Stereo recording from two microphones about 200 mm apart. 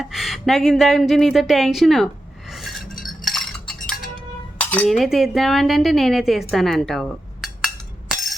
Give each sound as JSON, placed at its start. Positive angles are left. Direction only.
{"t": 0.0, "sound": "speech", "side_deg": 0}
{"t": 2.5, "sound": "cutlery", "side_deg": 0}
{"t": 4.6, "sound": "speech", "side_deg": 5}
{"t": 6.5, "sound": "cutlery", "side_deg": 0}